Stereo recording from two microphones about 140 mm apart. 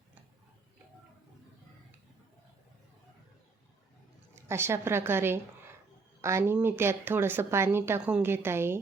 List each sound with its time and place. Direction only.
4.4 s a woman's voice: 20° right (ahead or behind)